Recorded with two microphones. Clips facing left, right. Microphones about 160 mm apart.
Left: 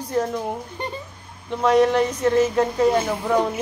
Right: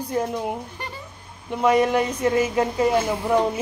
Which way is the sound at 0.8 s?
20° left (ahead or behind).